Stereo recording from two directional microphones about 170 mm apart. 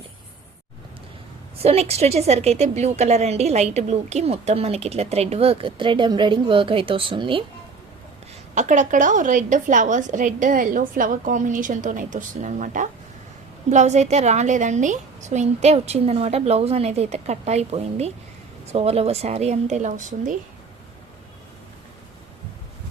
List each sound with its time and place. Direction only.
1.6 s a woman's voice: 35° right (ahead or behind)
8.5 s a woman's voice: 45° right (ahead or behind)